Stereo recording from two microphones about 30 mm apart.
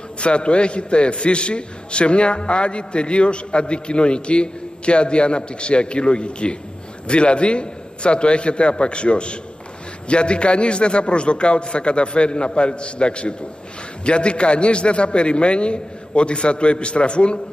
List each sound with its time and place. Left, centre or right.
0.2 s a man's voice: left